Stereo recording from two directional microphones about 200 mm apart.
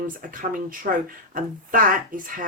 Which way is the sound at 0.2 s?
45° right (ahead or behind).